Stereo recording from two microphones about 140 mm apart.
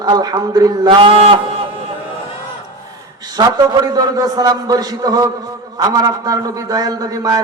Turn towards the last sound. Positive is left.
turn(degrees=-30)  # may be behind; listen again after turning